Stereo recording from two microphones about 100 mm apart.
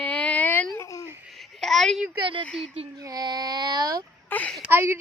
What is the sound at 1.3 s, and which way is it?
Babbling, centre (ahead or behind).